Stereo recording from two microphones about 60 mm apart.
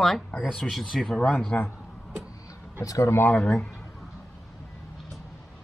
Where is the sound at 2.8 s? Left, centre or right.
Left.